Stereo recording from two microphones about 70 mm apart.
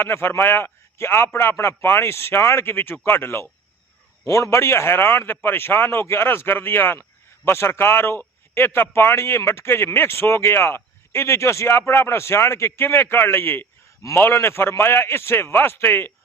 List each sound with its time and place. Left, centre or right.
0.0 s speech: left
4.3 s speech: left